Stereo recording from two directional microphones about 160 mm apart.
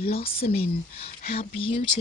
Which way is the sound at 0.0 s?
40° left (ahead or behind).